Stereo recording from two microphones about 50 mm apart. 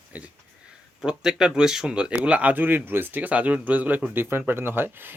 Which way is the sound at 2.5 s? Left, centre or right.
Right.